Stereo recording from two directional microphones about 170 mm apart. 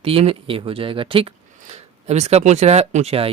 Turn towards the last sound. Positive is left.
turn(degrees=-35)  # may be behind; listen again after turning